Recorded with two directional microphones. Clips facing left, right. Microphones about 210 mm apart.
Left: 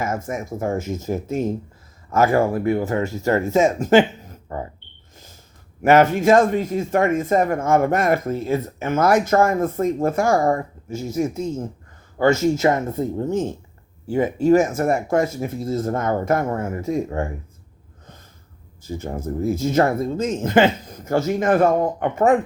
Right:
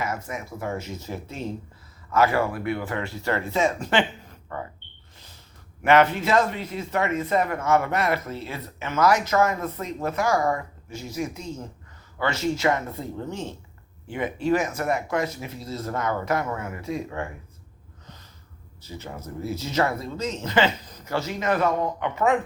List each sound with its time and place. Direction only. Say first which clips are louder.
0.0 s speech: left 5 dB; 45° left (ahead or behind)
4.4 s speech: left 5 dB; 30° left (ahead or behind)
5.8 s speech: left 5 dB; 45° left (ahead or behind)
18.8 s speech: left 9 dB; 50° left (ahead or behind)